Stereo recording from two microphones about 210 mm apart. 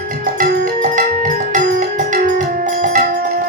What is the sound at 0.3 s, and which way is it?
Music, 40° right (ahead or behind).